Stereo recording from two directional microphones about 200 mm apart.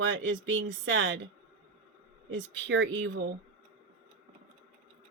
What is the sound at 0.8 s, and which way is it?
Speech, 75° right (ahead or behind).